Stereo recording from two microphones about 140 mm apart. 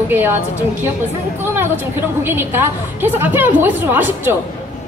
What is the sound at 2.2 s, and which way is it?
Speech, 15° right (ahead or behind).